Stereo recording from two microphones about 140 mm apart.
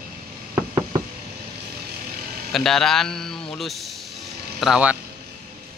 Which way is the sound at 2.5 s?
Centre (ahead or behind).